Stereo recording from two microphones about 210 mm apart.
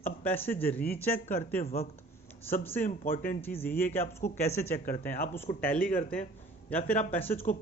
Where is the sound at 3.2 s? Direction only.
10° left (ahead or behind).